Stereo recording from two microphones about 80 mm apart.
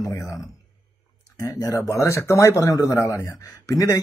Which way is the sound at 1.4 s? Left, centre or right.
Left.